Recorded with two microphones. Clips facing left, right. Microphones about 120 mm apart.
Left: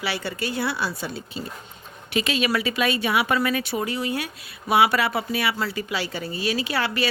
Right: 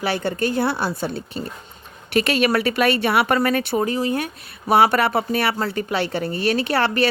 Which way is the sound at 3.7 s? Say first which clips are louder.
Right 5 dB; 40° right (ahead or behind).